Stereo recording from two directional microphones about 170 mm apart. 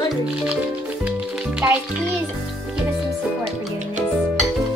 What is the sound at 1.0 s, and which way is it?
Music, 10° right (ahead or behind).